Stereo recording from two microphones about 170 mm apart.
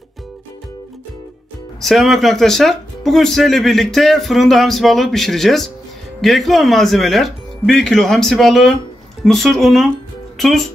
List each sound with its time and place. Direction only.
1.8 s speech: centre (ahead or behind)